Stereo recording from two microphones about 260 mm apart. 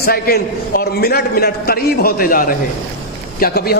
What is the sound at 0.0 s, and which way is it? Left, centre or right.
A man's voice, left.